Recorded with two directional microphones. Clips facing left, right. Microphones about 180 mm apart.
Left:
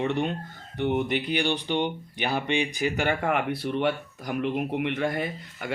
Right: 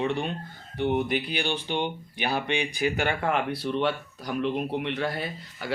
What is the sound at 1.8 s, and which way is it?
Speech, 15° left (ahead or behind).